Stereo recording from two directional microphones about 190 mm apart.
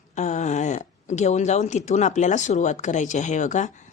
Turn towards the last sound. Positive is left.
turn(degrees=40)  # may be behind; listen again after turning